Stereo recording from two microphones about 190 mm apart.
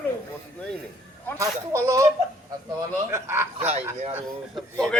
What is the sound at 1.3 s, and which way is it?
Speech, 15° right (ahead or behind).